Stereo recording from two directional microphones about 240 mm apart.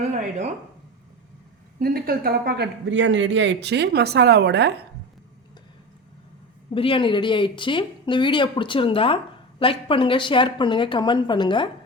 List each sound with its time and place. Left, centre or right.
0.0 s speech: right
1.8 s speech: right
6.7 s speech: left